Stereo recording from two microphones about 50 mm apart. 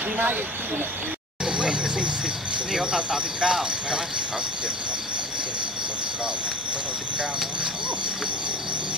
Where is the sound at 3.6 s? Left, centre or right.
Centre.